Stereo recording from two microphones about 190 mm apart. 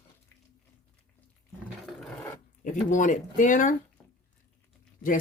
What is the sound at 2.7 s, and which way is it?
Speech, 40° left (ahead or behind).